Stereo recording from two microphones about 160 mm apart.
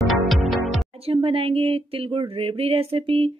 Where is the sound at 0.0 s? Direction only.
Centre (ahead or behind).